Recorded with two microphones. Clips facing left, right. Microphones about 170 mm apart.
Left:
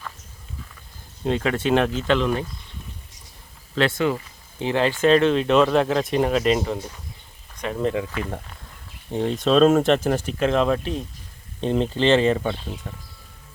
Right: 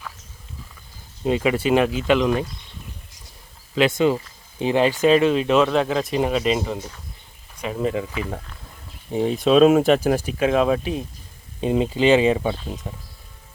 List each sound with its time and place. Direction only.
1.2 s speech: 5° right (ahead or behind)
3.8 s speech: 20° right (ahead or behind)